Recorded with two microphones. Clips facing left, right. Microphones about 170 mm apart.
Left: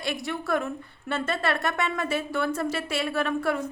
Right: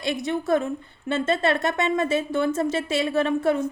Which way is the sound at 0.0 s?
20° right (ahead or behind).